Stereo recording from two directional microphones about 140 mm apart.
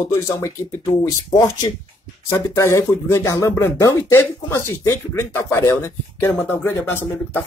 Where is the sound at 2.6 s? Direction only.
20° left (ahead or behind).